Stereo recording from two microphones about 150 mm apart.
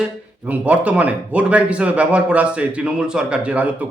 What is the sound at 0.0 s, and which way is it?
Speech, 10° right (ahead or behind).